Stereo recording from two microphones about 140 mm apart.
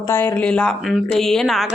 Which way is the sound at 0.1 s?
15° left (ahead or behind).